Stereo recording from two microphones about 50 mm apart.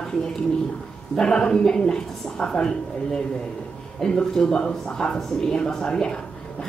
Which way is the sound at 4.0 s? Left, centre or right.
Centre.